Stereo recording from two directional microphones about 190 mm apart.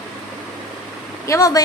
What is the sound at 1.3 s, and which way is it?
Speech, 20° left (ahead or behind).